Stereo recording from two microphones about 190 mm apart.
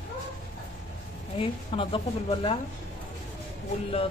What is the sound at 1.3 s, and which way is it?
A woman's voice, 25° left (ahead or behind).